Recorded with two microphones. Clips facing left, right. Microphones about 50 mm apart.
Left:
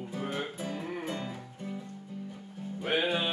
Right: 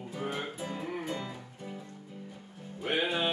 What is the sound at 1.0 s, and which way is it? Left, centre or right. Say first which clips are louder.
Music: even; centre.